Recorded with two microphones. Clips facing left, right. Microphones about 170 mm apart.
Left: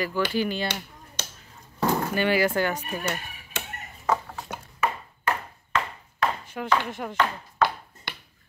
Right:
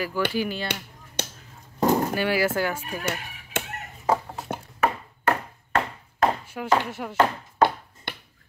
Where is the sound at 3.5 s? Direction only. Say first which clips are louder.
Right 6 dB; 50° right (ahead or behind).